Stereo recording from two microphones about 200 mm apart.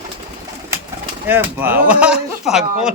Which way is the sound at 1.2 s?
10° right (ahead or behind).